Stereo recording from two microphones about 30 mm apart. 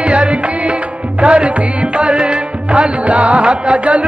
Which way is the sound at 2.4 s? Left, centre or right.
Right.